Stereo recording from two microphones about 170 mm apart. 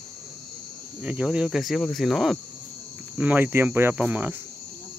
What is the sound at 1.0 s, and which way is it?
Speech, 5° right (ahead or behind).